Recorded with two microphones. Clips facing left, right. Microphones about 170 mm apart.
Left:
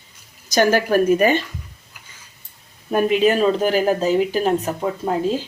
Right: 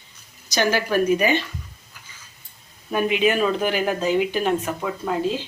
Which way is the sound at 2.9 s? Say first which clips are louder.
Left 4 dB; 40° left (ahead or behind).